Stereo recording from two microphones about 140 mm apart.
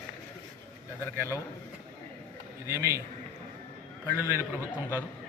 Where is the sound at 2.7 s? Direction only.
20° right (ahead or behind).